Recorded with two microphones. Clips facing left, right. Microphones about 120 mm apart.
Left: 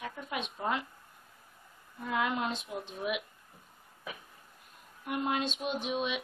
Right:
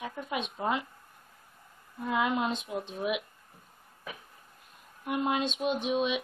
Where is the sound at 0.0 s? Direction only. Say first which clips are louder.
Right 3 dB; 10° right (ahead or behind).